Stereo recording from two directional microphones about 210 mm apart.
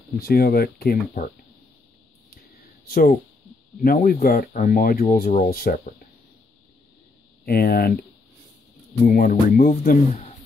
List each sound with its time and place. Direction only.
0.2 s speech: 45° left (ahead or behind)
2.9 s speech: 45° left (ahead or behind)
7.4 s speech: 45° left (ahead or behind)
9.0 s speech: 45° left (ahead or behind)